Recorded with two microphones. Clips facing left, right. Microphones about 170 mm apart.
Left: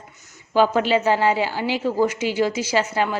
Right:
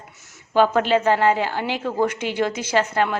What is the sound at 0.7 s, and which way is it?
A woman's voice, 50° right (ahead or behind).